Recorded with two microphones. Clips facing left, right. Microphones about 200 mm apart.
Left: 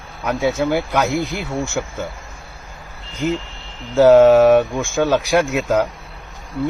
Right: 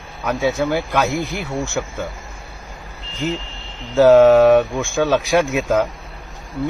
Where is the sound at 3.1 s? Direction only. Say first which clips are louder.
Left 2 dB; 15° left (ahead or behind).